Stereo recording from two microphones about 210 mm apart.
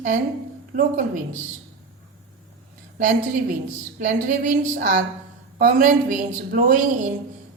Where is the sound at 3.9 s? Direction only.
35° right (ahead or behind).